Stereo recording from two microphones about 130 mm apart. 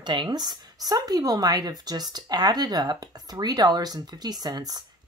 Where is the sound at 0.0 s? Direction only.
35° right (ahead or behind).